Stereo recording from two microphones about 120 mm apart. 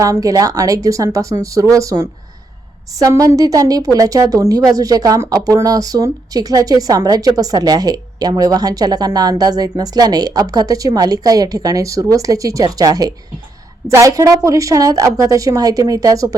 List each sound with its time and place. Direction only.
0.0 s a woman's voice: 30° right (ahead or behind)